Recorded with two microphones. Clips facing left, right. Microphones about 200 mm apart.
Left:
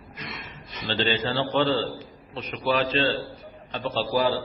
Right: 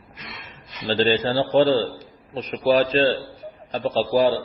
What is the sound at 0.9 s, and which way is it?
A man's voice, 40° right (ahead or behind).